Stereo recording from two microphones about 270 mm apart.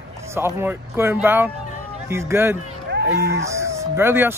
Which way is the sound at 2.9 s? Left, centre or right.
Right.